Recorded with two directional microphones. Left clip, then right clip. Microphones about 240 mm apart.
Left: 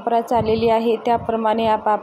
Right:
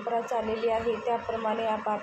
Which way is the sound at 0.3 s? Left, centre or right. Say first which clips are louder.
Left 11 dB; left.